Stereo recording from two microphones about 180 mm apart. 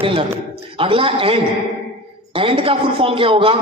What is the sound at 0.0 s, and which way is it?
A man's voice, 30° right (ahead or behind).